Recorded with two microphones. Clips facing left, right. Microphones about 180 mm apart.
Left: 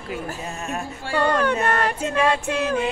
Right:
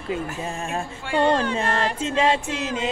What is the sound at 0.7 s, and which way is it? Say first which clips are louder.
A woman's voice: even; 25° right (ahead or behind).